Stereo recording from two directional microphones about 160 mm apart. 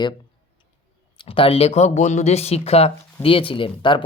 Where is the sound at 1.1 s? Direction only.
30° left (ahead or behind).